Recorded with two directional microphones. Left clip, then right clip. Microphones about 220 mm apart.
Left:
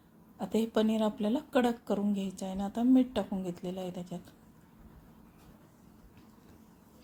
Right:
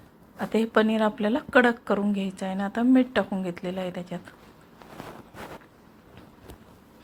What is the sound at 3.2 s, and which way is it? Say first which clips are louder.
Speech: right 8 dB; 30° right (ahead or behind).